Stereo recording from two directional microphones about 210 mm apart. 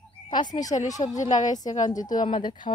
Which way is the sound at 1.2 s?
35° left (ahead or behind).